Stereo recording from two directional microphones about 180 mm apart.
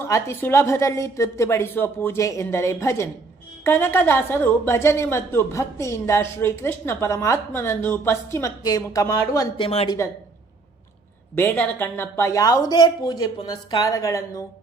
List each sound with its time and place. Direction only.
0.1 s a woman's voice: 15° left (ahead or behind)
9.6 s speech: 35° left (ahead or behind)
11.3 s speech: 10° left (ahead or behind)